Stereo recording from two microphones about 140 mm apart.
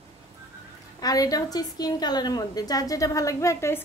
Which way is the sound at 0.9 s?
25° left (ahead or behind).